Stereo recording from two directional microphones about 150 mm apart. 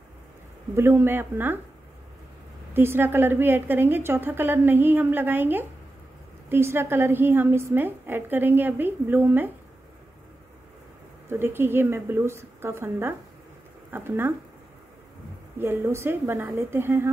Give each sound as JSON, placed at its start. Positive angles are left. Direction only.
{"t": 0.7, "sound": "a woman's voice", "side_deg": -15}
{"t": 2.7, "sound": "a woman's voice", "side_deg": -15}
{"t": 11.2, "sound": "a woman's voice", "side_deg": -15}
{"t": 15.6, "sound": "a woman's voice", "side_deg": -15}